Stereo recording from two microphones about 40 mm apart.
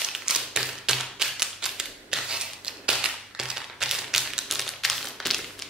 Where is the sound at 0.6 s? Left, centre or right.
Centre.